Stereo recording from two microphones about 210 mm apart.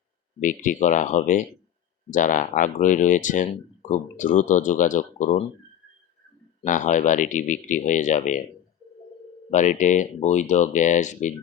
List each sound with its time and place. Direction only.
0.3 s speech: 40° left (ahead or behind)
6.6 s speech: 35° left (ahead or behind)
9.5 s speech: 35° left (ahead or behind)